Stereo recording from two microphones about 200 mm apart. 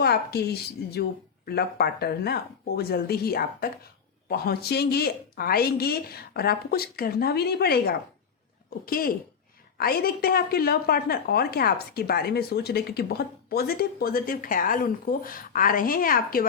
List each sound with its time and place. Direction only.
0.0 s a woman's voice: 50° left (ahead or behind)